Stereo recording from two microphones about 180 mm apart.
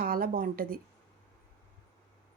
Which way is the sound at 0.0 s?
55° right (ahead or behind).